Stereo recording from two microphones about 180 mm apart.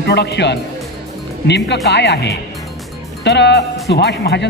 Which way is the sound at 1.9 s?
70° left (ahead or behind).